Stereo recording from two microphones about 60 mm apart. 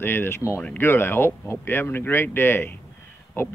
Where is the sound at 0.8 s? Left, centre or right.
Left.